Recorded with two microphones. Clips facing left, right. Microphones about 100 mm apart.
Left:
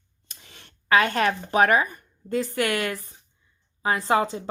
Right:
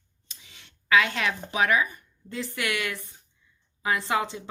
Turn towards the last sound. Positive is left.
turn(degrees=40)  # may be behind; listen again after turning